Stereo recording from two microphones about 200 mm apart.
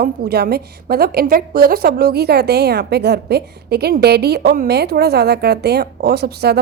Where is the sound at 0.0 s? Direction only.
50° right (ahead or behind).